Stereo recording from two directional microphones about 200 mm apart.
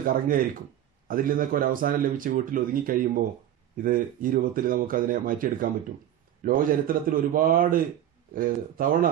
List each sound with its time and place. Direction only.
0.0 s speech: 45° right (ahead or behind)